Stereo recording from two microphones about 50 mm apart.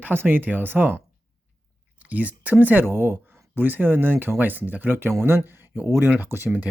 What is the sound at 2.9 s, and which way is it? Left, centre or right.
Speech, right.